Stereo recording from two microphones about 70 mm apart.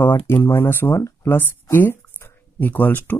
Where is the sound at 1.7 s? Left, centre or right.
Left.